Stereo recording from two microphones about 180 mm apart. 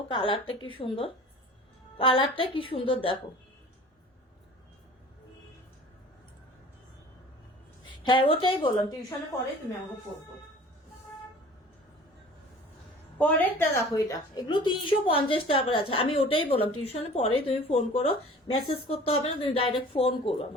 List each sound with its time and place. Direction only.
0.1 s a woman's voice: 30° left (ahead or behind)
7.9 s a woman's voice: 25° left (ahead or behind)
13.1 s a woman's voice: 10° left (ahead or behind); by 20.5 s 30° left (ahead or behind)